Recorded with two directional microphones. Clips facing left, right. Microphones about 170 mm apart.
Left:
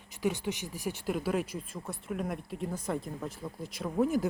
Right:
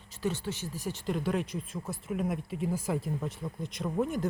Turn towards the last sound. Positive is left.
turn(degrees=5)  # may be behind; listen again after turning